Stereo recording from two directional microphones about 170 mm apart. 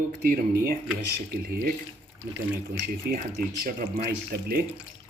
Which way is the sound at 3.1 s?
60° right (ahead or behind).